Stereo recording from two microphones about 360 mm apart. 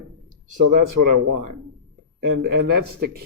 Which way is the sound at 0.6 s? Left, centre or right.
Right.